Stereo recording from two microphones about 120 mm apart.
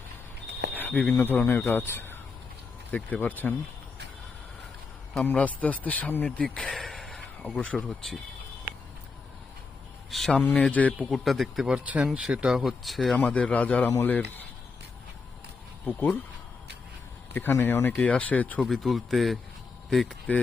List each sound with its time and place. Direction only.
0.7 s cricket: 15° left (ahead or behind)
1.1 s speech: 15° left (ahead or behind)
5.2 s speech: 10° left (ahead or behind)
10.1 s speech: 5° left (ahead or behind)
11.1 s speech: centre (ahead or behind)
13.1 s speech: 10° left (ahead or behind)
15.9 s speech: 15° left (ahead or behind)
17.3 s speech: 15° left (ahead or behind)
18.7 s speech: centre (ahead or behind)